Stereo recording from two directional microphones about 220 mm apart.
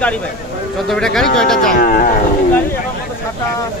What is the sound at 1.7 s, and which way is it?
Speech, 40° left (ahead or behind).